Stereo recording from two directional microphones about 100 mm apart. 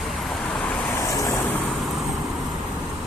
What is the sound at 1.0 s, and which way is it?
Vehicle, 35° left (ahead or behind).